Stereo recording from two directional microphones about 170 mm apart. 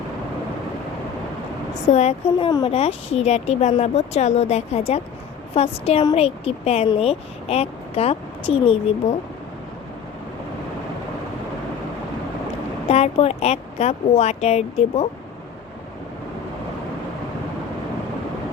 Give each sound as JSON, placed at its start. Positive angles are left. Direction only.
{"t": 1.9, "sound": "speech", "side_deg": 40}
{"t": 2.5, "sound": "speech", "side_deg": 25}
{"t": 2.7, "sound": "speech", "side_deg": 35}
{"t": 12.9, "sound": "speech", "side_deg": 35}